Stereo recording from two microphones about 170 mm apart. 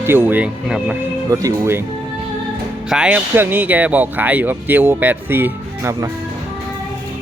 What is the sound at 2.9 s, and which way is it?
Speech, 5° right (ahead or behind).